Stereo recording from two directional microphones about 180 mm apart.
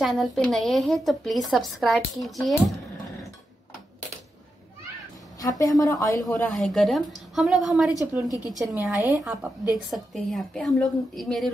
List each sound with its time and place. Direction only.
0.0 s a woman's voice: centre (ahead or behind)
5.4 s a woman's voice: 20° left (ahead or behind)
6.3 s a woman's voice: 5° left (ahead or behind)
8.0 s a woman's voice: 15° right (ahead or behind)
8.5 s a woman's voice: centre (ahead or behind)